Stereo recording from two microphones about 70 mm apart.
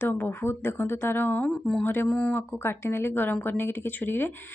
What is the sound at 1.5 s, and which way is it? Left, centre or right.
Speech, centre.